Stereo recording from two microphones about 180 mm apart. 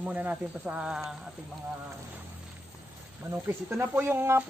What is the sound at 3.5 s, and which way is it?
Speech, 15° right (ahead or behind).